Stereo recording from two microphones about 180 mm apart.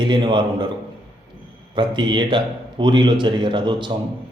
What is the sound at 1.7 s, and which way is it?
A man's voice, 25° right (ahead or behind).